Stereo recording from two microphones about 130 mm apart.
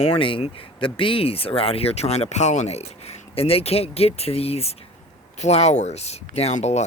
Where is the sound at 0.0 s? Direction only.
45° left (ahead or behind).